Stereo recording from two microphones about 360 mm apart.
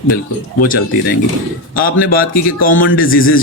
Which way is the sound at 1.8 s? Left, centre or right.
Left.